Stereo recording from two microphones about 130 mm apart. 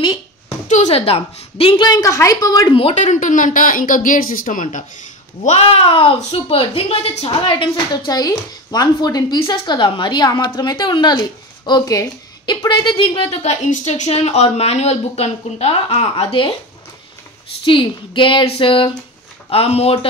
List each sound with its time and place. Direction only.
0.7 s a woman's voice: 60° left (ahead or behind); by 1.9 s 45° left (ahead or behind)
1.9 s a woman's voice: 25° left (ahead or behind)
2.7 s a woman's voice: 45° left (ahead or behind)
3.0 s speech: 75° left (ahead or behind); by 4.8 s 90° left
5.4 s a woman's voice: 55° left (ahead or behind)
17.6 s a woman's voice: 40° left (ahead or behind)